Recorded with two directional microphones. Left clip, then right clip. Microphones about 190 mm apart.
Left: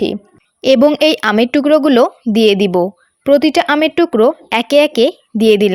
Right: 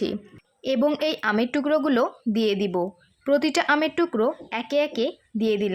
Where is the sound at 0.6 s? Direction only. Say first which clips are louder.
Left 13 dB; 45° left (ahead or behind).